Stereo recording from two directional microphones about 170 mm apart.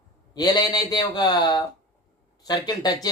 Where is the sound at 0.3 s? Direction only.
25° left (ahead or behind).